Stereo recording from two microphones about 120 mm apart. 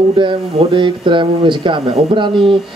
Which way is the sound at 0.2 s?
40° right (ahead or behind).